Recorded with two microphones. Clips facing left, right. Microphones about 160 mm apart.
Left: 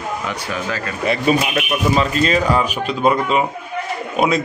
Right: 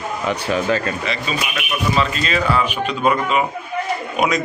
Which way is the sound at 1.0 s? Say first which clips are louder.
Left 7 dB; 55° left (ahead or behind).